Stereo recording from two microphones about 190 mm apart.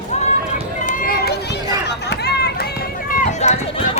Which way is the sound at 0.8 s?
45° left (ahead or behind).